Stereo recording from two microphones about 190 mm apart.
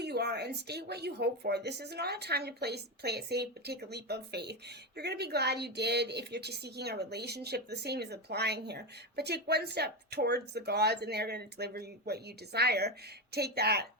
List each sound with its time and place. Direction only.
0.0 s a woman's voice: 60° right (ahead or behind)